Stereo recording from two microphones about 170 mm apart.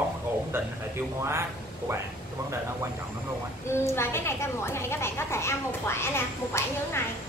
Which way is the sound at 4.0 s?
15° left (ahead or behind).